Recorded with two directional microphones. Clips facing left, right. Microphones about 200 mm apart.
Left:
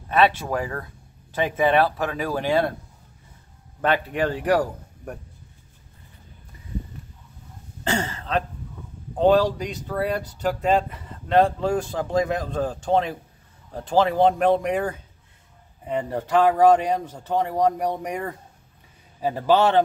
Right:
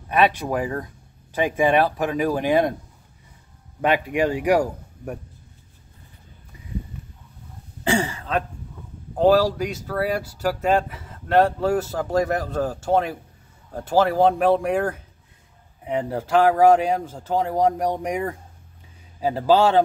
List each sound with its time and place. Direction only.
0.1 s speech: 15° right (ahead or behind)
3.8 s speech: 10° right (ahead or behind)
7.8 s throat clearing: 15° right (ahead or behind)
9.2 s speech: 5° right (ahead or behind)